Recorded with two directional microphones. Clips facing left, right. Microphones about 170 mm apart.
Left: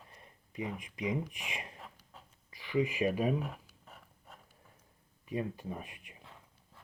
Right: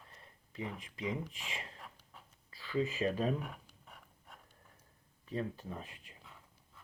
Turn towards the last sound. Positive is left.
turn(degrees=15)  # may be behind; listen again after turning